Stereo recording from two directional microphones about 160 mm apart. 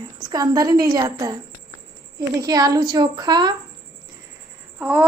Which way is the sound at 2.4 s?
25° right (ahead or behind).